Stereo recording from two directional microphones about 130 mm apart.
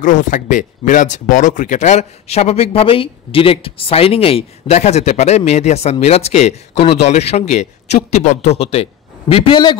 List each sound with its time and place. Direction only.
0.0 s a man's voice: 80° left; by 9.8 s 35° left (ahead or behind)